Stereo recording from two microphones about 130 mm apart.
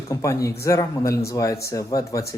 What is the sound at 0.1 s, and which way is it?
Speech, 25° left (ahead or behind).